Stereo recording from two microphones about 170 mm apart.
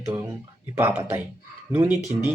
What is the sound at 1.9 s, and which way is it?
Speech, 20° left (ahead or behind).